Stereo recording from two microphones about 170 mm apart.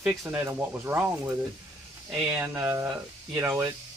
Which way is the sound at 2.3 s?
15° right (ahead or behind).